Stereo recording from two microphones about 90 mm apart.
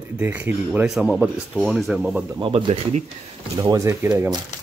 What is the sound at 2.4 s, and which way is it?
Speech, 80° right.